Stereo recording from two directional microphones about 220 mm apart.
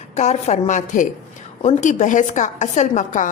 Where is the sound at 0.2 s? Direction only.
30° left (ahead or behind).